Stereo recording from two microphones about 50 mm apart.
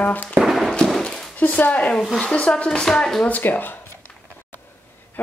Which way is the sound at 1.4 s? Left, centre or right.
Left.